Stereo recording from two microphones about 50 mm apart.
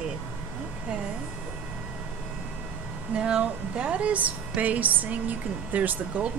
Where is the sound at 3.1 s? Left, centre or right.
Right.